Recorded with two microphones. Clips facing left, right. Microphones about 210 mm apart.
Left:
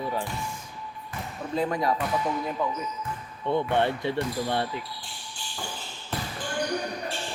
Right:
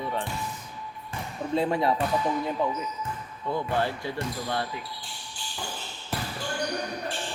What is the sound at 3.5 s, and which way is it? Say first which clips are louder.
Speech: left 3 dB; 25° left (ahead or behind).